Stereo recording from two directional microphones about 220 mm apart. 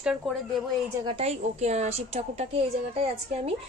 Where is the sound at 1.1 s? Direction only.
25° right (ahead or behind).